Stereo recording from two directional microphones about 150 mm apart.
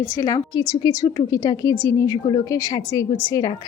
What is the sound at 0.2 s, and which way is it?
A woman's voice, 25° left (ahead or behind).